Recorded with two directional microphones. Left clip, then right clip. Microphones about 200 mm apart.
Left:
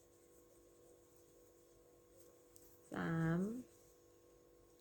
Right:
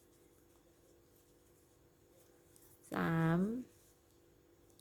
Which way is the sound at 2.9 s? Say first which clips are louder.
Right 6 dB; 40° right (ahead or behind).